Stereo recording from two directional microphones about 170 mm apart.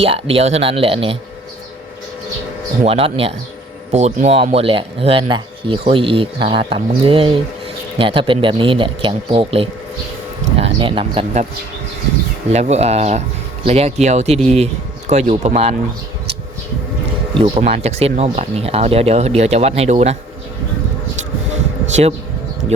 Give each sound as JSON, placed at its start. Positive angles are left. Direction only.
{"t": 0.0, "sound": "speech", "side_deg": -35}
{"t": 2.8, "sound": "speech", "side_deg": -35}
{"t": 12.5, "sound": "speech", "side_deg": -40}
{"t": 17.3, "sound": "speech", "side_deg": -35}